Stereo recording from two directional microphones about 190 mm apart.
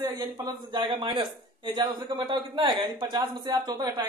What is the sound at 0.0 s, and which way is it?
A man's voice, 20° right (ahead or behind).